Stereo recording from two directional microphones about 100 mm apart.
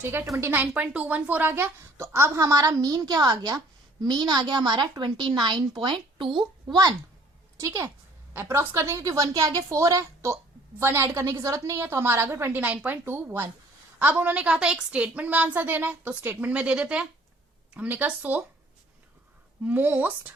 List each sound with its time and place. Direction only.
0.0 s a woman's voice: 25° right (ahead or behind); by 6.4 s 55° right (ahead or behind)
7.5 s a woman's voice: 30° right (ahead or behind); by 18.4 s 15° right (ahead or behind)
19.6 s a woman's voice: 15° right (ahead or behind)